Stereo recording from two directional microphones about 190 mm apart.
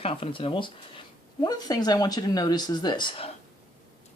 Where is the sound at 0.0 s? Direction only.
30° left (ahead or behind).